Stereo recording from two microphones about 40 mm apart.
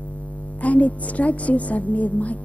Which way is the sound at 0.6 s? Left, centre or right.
Left.